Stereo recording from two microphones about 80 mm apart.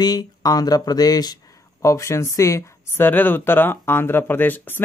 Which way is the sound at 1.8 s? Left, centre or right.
Left.